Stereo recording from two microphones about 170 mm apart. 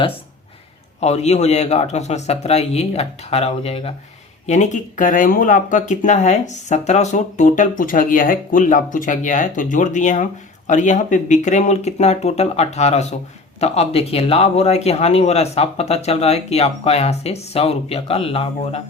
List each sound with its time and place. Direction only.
0.9 s speech: 40° left (ahead or behind)